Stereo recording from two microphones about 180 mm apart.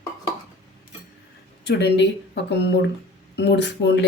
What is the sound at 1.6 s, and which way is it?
Speech, 70° left (ahead or behind).